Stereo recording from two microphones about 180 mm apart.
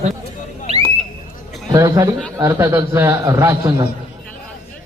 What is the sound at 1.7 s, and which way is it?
A man's voice, 20° right (ahead or behind).